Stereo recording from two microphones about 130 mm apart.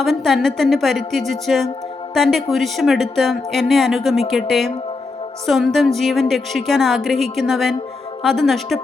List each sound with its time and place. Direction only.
0.0 s speech: centre (ahead or behind)